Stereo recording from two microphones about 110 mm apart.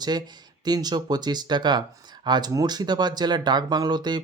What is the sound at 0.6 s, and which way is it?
Speech, 40° right (ahead or behind).